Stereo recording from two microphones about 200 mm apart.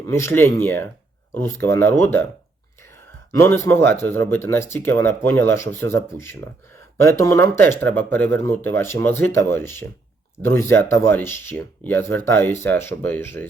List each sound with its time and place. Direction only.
0.1 s speech: 10° left (ahead or behind)
3.3 s speech: 15° left (ahead or behind)